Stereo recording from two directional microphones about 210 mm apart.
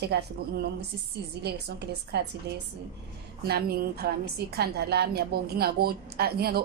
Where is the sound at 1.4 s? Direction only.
50° right (ahead or behind).